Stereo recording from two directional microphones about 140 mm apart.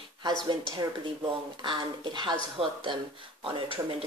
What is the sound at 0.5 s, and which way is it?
Speech, 30° right (ahead or behind).